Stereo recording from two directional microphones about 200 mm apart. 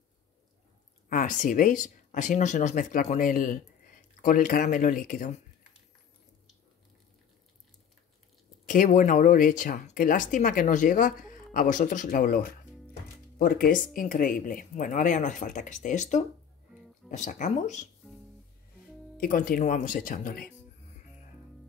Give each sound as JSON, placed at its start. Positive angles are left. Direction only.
{"t": 1.0, "sound": "speech", "side_deg": 40}
{"t": 8.6, "sound": "speech", "side_deg": 40}
{"t": 19.1, "sound": "speech", "side_deg": 45}